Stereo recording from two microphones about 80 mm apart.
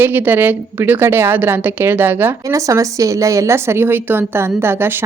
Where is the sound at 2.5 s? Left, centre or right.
Right.